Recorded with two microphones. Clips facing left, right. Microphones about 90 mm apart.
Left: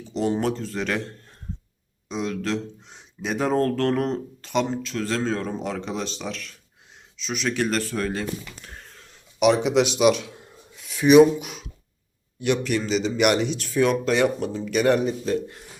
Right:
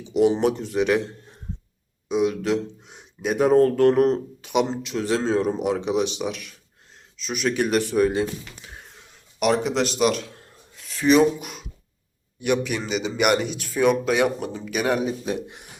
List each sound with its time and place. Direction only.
0.1 s speech: 10° right (ahead or behind)
8.6 s a sound: 10° right (ahead or behind)
9.1 s speech: centre (ahead or behind)
15.2 s speech: 15° right (ahead or behind)